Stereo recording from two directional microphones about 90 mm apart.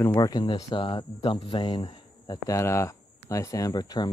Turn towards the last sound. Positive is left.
turn(degrees=50)  # may be behind; listen again after turning